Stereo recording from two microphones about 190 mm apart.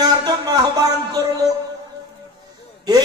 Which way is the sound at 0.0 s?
20° right (ahead or behind).